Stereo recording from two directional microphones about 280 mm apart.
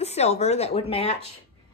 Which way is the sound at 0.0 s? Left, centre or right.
Left.